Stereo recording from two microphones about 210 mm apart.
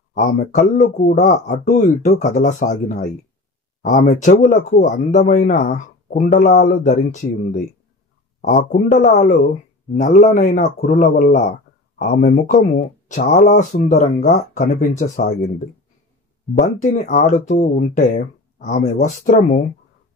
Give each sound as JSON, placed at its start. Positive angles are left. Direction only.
{"t": 0.1, "sound": "speech", "side_deg": 40}
{"t": 8.7, "sound": "speech", "side_deg": 40}
{"t": 10.2, "sound": "speech", "side_deg": 35}
{"t": 16.6, "sound": "speech", "side_deg": 35}